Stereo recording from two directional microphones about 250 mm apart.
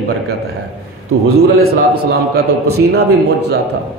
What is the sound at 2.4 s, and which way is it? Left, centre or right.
A man's voice, right.